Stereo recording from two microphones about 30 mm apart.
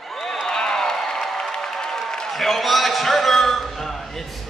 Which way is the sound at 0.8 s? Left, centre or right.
Centre.